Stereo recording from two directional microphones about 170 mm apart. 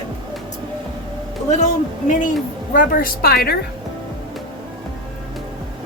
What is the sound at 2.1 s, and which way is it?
A woman's voice, 50° left (ahead or behind).